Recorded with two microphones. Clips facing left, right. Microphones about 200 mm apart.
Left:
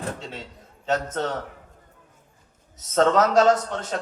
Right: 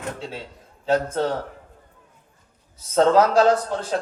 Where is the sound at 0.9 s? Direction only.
30° right (ahead or behind).